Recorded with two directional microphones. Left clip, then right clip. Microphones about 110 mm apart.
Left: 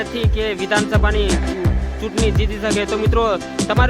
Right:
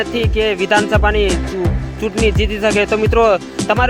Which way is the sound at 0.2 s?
35° right (ahead or behind).